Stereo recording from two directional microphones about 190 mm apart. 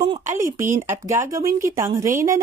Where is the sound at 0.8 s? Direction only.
15° right (ahead or behind).